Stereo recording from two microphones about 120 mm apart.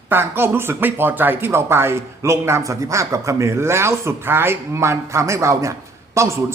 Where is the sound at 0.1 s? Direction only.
20° right (ahead or behind).